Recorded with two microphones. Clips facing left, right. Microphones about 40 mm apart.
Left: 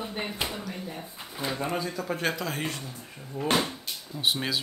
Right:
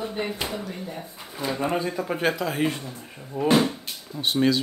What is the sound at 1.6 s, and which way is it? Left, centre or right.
Speech, right.